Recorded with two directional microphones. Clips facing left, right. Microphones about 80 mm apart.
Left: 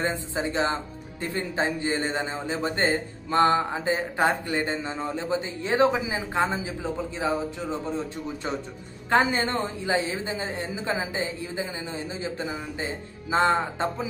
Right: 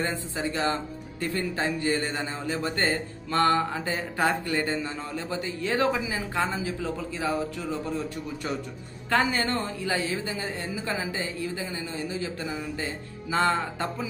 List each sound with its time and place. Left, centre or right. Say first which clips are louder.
0.0 s a man's voice: left 2 dB; left